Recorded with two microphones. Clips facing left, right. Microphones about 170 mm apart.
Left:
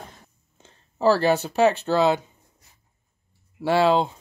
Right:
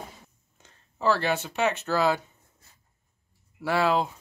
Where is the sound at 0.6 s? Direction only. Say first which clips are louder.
Left 6 dB; 35° left (ahead or behind).